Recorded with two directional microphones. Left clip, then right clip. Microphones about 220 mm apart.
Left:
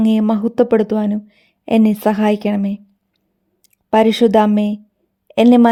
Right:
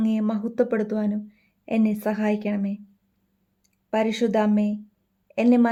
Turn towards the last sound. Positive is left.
turn(degrees=40)  # may be behind; listen again after turning